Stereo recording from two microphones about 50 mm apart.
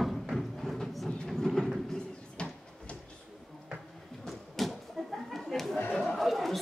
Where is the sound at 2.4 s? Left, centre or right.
Left.